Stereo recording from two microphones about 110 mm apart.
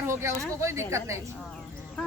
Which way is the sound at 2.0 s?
5° left (ahead or behind).